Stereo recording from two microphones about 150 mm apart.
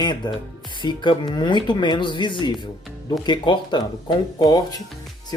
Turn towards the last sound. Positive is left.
turn(degrees=25)  # may be behind; listen again after turning